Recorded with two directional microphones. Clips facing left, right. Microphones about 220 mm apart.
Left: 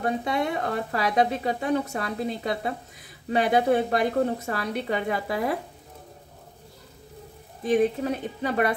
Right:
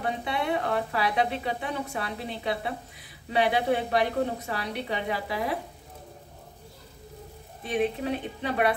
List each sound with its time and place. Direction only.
0.0 s speech: 45° left (ahead or behind)
7.6 s speech: 45° left (ahead or behind)